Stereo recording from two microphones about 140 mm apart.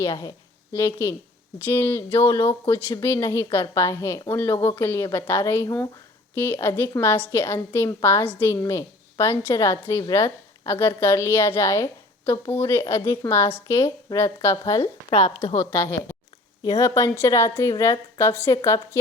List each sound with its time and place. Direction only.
0.0 s a woman's voice: 25° left (ahead or behind)
14.8 s a woman's voice: 50° left (ahead or behind)
15.5 s a woman's voice: 15° left (ahead or behind)